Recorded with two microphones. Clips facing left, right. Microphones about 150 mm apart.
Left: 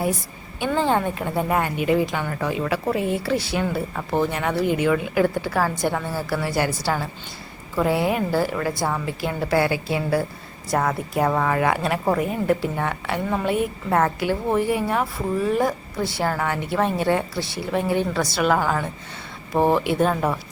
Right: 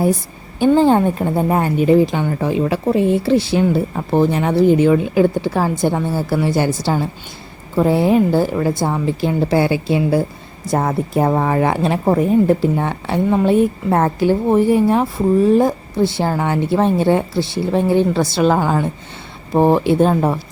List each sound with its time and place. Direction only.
0.6 s a woman's voice: 35° right (ahead or behind)